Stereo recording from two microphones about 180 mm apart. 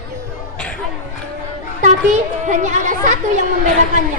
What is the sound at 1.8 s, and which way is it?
Speech, 45° right (ahead or behind).